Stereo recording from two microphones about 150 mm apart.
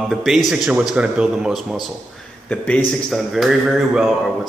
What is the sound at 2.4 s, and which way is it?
A man's voice, 10° left (ahead or behind).